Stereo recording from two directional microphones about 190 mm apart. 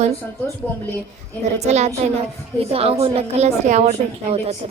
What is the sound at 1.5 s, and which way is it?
Speech, 35° right (ahead or behind).